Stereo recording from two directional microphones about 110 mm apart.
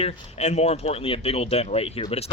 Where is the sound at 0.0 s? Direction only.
90° left.